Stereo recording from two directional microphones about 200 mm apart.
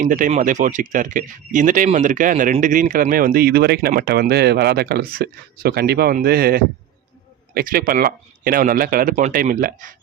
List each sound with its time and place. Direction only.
0.0 s speech: 40° right (ahead or behind)